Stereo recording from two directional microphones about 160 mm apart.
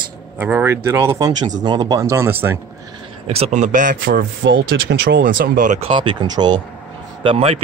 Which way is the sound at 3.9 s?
70° right (ahead or behind).